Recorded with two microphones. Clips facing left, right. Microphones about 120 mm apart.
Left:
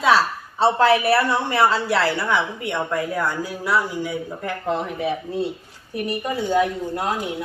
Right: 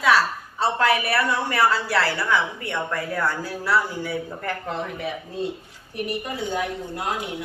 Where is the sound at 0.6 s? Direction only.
30° left (ahead or behind).